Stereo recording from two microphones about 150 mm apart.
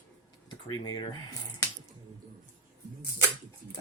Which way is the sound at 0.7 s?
30° left (ahead or behind).